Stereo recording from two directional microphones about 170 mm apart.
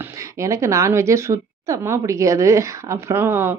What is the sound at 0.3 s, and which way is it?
Speech, 15° right (ahead or behind).